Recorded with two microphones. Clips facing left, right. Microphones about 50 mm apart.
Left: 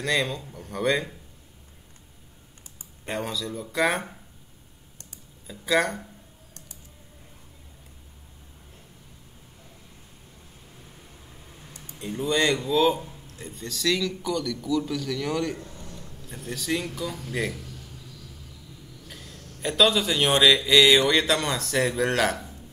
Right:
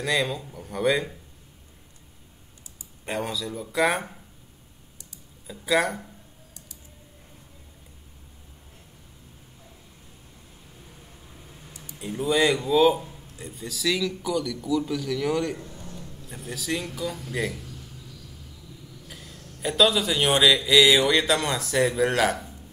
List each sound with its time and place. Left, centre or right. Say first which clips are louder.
0.0 s speech: even; centre
3.1 s speech: right 1 dB; centre
5.5 s speech: even; centre
11.7 s a sound: even; left
12.0 s speech: right 2 dB; centre
19.0 s a man's voice: left 1 dB; centre